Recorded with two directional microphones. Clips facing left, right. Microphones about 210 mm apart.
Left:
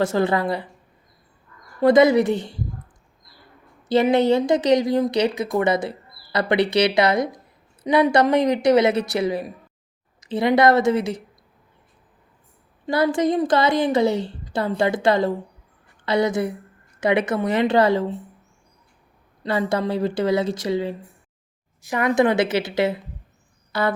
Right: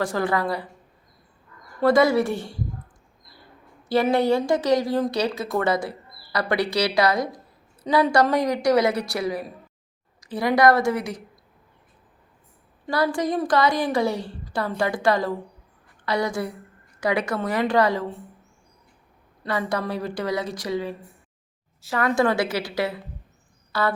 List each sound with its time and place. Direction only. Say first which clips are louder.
0.0 s a woman's voice: left 4 dB; 25° left (ahead or behind)
1.8 s a woman's voice: left 4 dB; 20° left (ahead or behind)
3.8 s a woman's voice: left 3 dB; 20° left (ahead or behind)
12.9 s a woman's voice: left 4 dB; 25° left (ahead or behind)
19.4 s a woman's voice: left 4 dB; 25° left (ahead or behind)